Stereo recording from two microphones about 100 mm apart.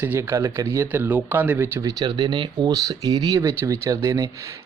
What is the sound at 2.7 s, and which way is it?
Speech, 40° right (ahead or behind).